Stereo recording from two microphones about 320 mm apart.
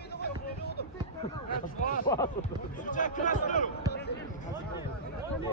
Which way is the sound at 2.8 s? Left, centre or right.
Left.